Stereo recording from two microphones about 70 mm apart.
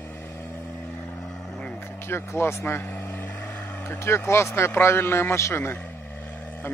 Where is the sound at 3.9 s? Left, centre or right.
Left.